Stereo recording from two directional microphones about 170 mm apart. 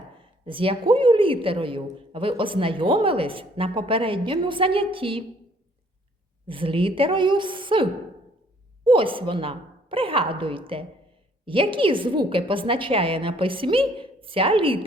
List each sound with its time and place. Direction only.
0.2 s a woman's voice: 30° right (ahead or behind)
6.5 s a woman's voice: 30° right (ahead or behind)